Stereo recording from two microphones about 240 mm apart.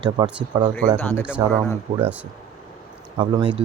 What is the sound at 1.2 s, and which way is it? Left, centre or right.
Speech, centre.